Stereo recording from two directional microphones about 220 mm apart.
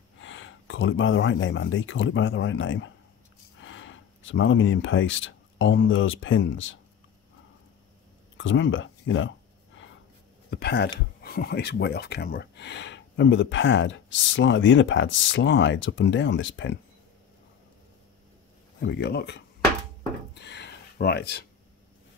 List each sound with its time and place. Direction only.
0.2 s speech: 60° left (ahead or behind)
8.4 s speech: 60° left (ahead or behind)
10.5 s speech: 50° left (ahead or behind)
18.8 s speech: 50° left (ahead or behind)
20.3 s a sound: 50° left (ahead or behind)